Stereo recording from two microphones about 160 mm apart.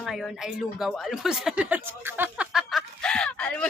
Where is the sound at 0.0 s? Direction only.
Centre (ahead or behind).